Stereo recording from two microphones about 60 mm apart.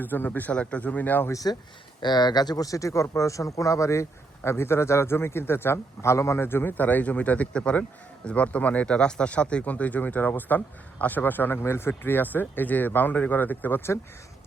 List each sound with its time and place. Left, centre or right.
0.0 s a man's voice: left
2.6 s speech: left
4.4 s a man's voice: left
6.4 s speech: left